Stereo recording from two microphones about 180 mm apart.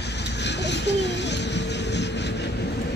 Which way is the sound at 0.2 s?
70° left (ahead or behind).